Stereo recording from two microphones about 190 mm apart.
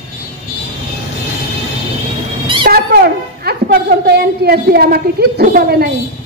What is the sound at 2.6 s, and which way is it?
A woman's voice, 55° right (ahead or behind).